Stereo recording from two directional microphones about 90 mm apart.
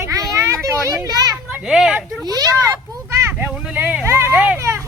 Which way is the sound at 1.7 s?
5° right (ahead or behind).